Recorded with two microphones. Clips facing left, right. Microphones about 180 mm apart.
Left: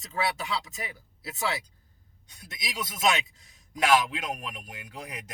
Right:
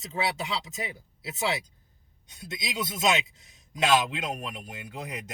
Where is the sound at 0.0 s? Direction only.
20° right (ahead or behind).